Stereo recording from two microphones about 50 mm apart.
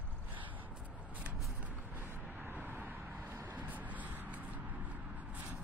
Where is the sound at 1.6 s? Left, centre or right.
Right.